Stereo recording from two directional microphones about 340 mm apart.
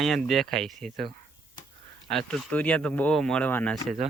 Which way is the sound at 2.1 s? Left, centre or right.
Centre.